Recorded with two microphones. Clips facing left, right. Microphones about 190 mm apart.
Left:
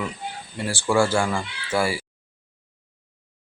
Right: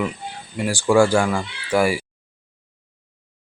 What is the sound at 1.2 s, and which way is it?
Speech, centre (ahead or behind).